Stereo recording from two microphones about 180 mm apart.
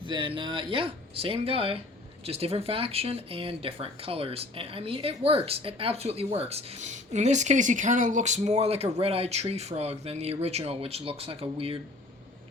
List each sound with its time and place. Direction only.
0.0 s speech: 30° right (ahead or behind)